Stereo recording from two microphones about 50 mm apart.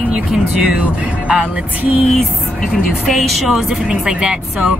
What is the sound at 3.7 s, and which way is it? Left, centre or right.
Speech, centre.